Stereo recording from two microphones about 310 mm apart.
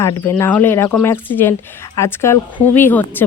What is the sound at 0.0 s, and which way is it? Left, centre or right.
Speech, centre.